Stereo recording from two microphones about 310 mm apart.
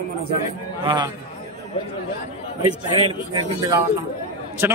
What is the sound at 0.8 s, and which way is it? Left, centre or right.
Speech, centre.